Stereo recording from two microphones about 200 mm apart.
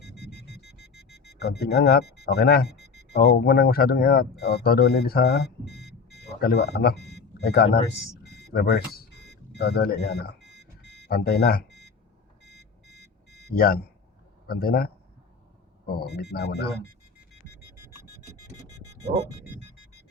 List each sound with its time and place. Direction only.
1.4 s speech: 50° left (ahead or behind)
10.5 s alarm clock: 60° right (ahead or behind)
11.1 s speech: 50° left (ahead or behind)
13.5 s a man's voice: 50° left (ahead or behind)
15.9 s speech: 50° left (ahead or behind)